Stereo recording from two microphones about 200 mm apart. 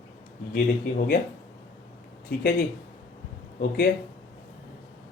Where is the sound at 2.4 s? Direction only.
50° left (ahead or behind).